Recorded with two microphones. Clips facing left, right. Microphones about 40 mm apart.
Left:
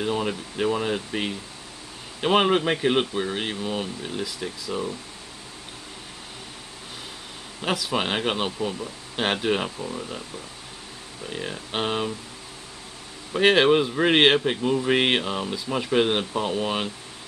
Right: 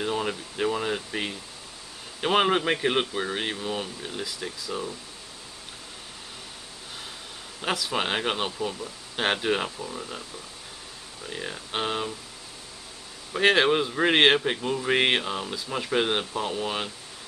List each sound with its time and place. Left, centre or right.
0.0 s speech: centre
7.6 s speech: centre
11.3 s speech: centre
13.3 s speech: centre